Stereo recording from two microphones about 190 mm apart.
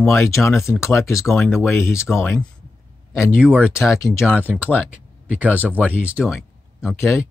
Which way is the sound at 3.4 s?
5° right (ahead or behind).